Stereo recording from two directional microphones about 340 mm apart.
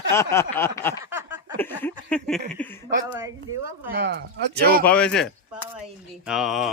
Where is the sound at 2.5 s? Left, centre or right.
Centre.